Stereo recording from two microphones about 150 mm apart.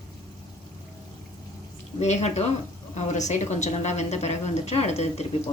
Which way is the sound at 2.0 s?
50° left (ahead or behind).